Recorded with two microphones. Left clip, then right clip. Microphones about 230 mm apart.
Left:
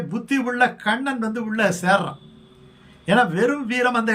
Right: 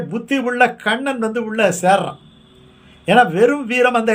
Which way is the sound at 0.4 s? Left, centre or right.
Centre.